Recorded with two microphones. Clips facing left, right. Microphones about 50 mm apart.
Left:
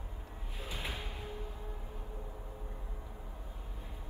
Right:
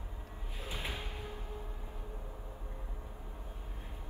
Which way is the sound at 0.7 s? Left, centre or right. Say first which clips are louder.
Even; right.